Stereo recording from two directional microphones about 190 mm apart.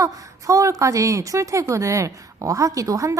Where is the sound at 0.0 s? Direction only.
15° right (ahead or behind).